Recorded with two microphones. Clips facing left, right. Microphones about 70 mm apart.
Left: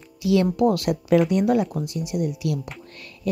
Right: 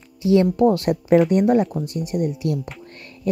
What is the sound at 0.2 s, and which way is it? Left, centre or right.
A woman's voice, right.